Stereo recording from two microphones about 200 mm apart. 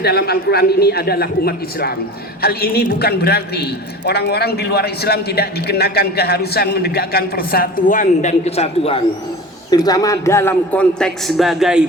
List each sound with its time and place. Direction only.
0.0 s a man's voice: 50° left (ahead or behind); by 9.0 s 30° left (ahead or behind)
9.6 s a man's voice: 20° left (ahead or behind); by 11.8 s centre (ahead or behind)